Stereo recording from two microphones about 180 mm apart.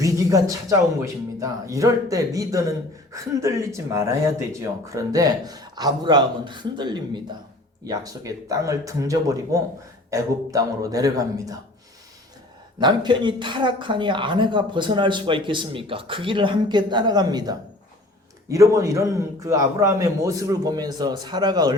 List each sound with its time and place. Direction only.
0.0 s speech: 20° right (ahead or behind)
12.8 s speech: 25° right (ahead or behind)